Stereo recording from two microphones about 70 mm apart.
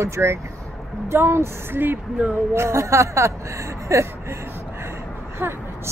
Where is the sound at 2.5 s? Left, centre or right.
Right.